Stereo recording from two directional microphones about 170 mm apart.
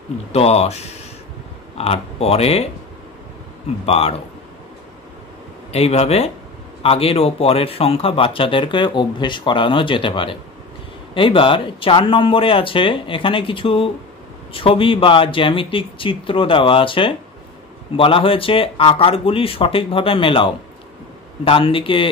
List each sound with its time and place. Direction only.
0.3 s speech: 35° left (ahead or behind)
3.8 s speech: 35° left (ahead or behind)
5.7 s speech: 35° left (ahead or behind)